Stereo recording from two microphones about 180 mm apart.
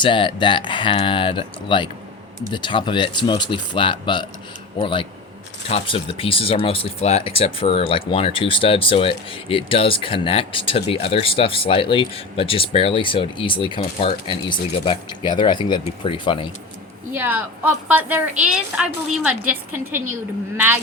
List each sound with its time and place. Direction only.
0.0 s speech: 25° left (ahead or behind)
17.2 s a woman's voice: 10° right (ahead or behind)